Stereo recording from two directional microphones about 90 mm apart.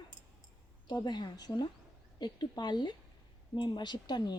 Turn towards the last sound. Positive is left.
turn(degrees=55)  # may be behind; listen again after turning